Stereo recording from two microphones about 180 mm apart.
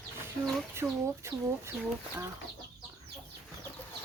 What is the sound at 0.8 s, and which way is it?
Speech, 15° right (ahead or behind).